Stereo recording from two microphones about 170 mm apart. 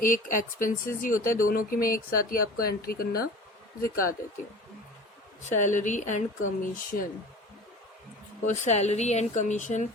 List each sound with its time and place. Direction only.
0.0 s speech: 50° left (ahead or behind)
5.4 s speech: 45° left (ahead or behind)
8.4 s speech: 40° left (ahead or behind)